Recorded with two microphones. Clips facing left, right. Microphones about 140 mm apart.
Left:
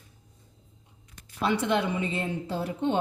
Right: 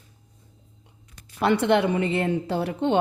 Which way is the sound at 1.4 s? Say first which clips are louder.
Right 6 dB; 70° right (ahead or behind).